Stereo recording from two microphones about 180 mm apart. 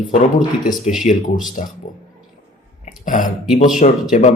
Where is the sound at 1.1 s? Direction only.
45° left (ahead or behind).